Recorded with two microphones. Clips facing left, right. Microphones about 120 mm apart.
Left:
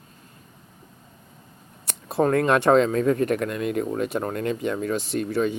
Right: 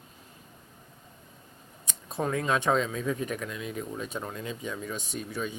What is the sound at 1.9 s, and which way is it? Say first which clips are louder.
Speech: left 9 dB; 65° left (ahead or behind).